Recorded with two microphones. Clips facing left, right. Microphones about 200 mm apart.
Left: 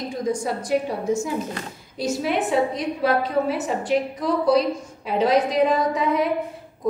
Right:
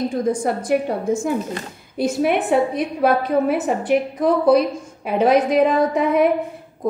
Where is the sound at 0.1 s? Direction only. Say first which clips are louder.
Right 4 dB; 55° right (ahead or behind).